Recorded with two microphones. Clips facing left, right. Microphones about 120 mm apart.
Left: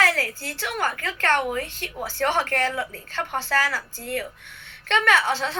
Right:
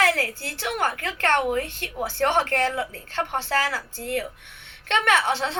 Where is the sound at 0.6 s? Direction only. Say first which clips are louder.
Right 1 dB; 20° right (ahead or behind).